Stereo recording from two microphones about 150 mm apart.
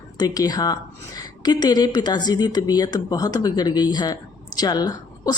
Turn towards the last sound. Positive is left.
turn(degrees=25)  # may be behind; listen again after turning